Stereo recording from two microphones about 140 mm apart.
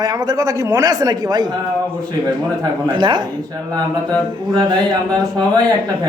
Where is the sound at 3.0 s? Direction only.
35° right (ahead or behind).